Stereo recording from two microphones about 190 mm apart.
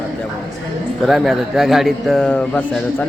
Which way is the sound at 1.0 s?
Centre (ahead or behind).